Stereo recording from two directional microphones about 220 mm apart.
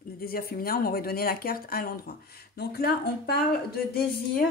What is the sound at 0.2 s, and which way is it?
A woman's voice, 45° left (ahead or behind).